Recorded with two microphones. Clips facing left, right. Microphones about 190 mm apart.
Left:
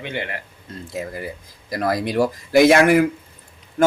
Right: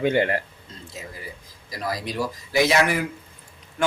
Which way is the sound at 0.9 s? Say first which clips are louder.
Left 10 dB; 60° left (ahead or behind).